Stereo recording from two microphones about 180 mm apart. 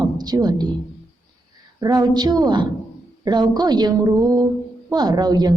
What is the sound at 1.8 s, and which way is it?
A woman's voice, 20° right (ahead or behind).